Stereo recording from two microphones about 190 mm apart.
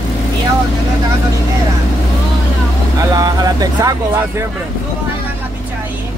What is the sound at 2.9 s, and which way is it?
Vehicle, 20° right (ahead or behind).